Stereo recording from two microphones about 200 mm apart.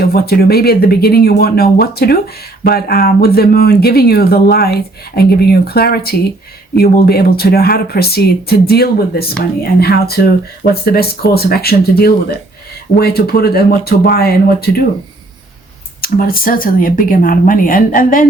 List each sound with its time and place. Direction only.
0.0 s speech: 50° left (ahead or behind)
16.0 s speech: 50° left (ahead or behind)